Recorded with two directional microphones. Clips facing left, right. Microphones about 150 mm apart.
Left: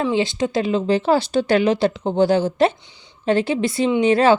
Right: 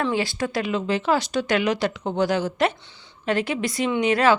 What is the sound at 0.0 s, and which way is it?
Speech, 20° left (ahead or behind).